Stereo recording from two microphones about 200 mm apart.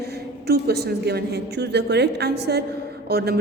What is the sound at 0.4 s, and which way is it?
A woman's voice, 55° right (ahead or behind).